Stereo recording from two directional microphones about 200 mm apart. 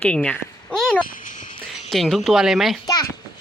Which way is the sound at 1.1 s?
40° left (ahead or behind).